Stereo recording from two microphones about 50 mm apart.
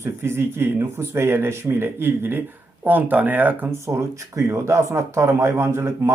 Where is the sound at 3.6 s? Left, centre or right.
Right.